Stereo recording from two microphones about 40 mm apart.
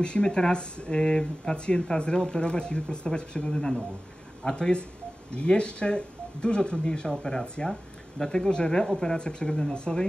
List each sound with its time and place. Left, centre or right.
0.0 s speech: left